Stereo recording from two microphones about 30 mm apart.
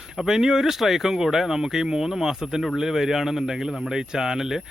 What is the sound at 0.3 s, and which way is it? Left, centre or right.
Speech, centre.